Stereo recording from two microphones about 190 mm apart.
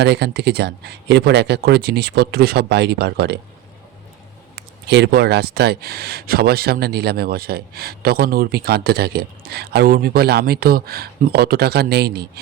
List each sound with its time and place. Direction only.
0.0 s speech: 60° right (ahead or behind)
4.5 s speech: 65° right (ahead or behind)